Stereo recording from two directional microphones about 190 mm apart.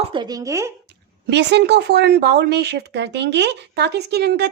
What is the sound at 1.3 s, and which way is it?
Speech, 65° right (ahead or behind).